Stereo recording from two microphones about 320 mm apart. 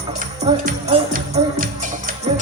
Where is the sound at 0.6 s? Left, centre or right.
Right.